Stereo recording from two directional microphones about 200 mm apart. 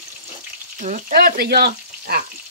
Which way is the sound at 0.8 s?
40° right (ahead or behind).